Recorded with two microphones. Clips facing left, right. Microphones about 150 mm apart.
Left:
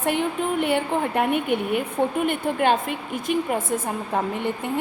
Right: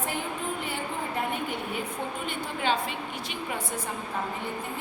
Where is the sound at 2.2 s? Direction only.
55° left (ahead or behind).